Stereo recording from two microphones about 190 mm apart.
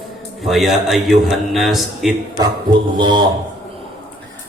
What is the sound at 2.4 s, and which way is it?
Speech, 25° right (ahead or behind).